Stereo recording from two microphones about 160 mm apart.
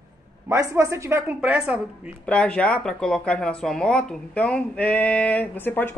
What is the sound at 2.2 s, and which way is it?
Speech, 5° left (ahead or behind).